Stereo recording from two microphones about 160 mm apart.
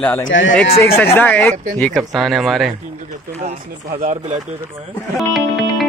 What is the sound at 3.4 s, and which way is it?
Speech, 50° right (ahead or behind).